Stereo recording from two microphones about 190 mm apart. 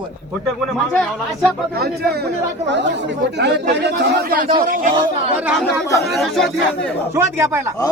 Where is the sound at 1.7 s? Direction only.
55° right (ahead or behind).